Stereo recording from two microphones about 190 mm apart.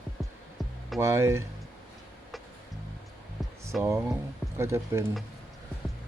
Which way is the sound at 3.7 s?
Centre (ahead or behind).